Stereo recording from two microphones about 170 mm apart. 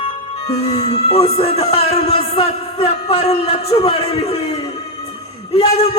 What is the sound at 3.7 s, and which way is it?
A man's voice, 30° left (ahead or behind).